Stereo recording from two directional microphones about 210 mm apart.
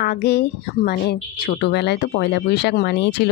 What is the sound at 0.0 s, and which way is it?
A woman's voice, 50° left (ahead or behind).